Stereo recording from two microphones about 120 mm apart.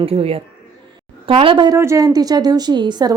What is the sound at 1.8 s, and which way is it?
A woman's voice, 25° right (ahead or behind).